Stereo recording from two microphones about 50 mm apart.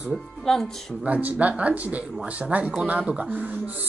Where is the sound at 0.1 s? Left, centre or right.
Centre.